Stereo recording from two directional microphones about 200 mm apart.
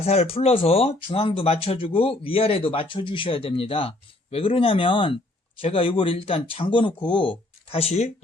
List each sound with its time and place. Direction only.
0.0 s speech: 30° left (ahead or behind)